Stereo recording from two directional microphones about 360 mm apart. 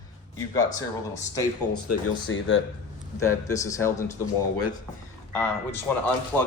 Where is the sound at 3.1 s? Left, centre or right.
Centre.